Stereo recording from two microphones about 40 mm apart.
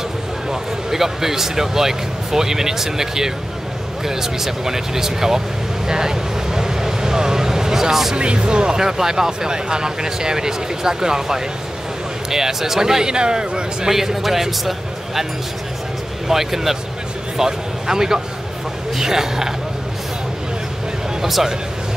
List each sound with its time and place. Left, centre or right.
0.5 s speech: centre
5.9 s vehicle: centre
8.2 s speech: right
13.8 s speech: centre
16.3 s speech: centre
21.2 s speech: centre